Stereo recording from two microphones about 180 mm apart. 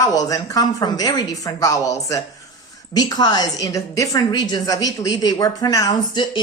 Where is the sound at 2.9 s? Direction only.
20° left (ahead or behind).